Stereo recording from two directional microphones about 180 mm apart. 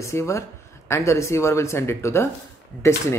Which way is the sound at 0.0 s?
15° left (ahead or behind).